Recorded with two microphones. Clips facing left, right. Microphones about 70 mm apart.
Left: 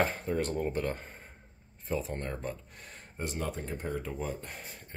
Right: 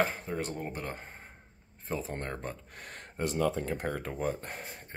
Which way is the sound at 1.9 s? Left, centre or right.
Right.